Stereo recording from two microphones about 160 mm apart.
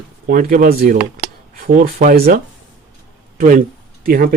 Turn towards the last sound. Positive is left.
turn(degrees=-65)  # may be behind; listen again after turning